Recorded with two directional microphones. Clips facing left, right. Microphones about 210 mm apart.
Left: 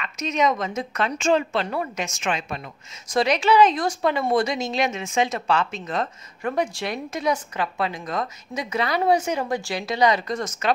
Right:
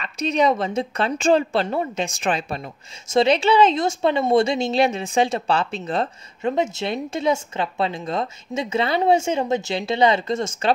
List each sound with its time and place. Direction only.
0.0 s a woman's voice: 35° right (ahead or behind)